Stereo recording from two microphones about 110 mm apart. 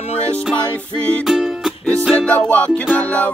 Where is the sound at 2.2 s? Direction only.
15° left (ahead or behind).